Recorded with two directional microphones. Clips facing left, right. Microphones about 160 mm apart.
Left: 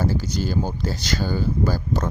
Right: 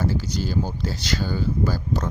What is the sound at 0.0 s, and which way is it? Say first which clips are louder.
Speech: left 1 dB; 45° left (ahead or behind).